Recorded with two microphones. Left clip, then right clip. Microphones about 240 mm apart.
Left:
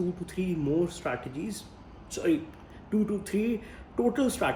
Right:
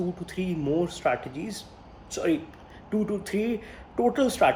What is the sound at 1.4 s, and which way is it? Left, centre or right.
Speech, right.